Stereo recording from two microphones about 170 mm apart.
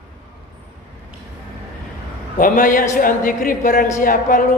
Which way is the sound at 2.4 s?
50° left (ahead or behind).